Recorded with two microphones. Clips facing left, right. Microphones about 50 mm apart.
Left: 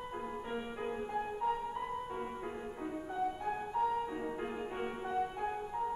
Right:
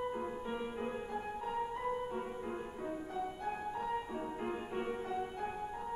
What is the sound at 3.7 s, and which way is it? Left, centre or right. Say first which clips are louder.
Music: left 4 dB; centre.